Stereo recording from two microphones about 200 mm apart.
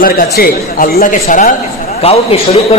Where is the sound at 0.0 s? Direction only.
45° left (ahead or behind).